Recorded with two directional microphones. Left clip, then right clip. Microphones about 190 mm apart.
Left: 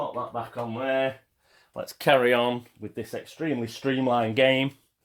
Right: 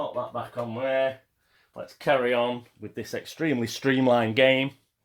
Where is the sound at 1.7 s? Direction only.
50° left (ahead or behind).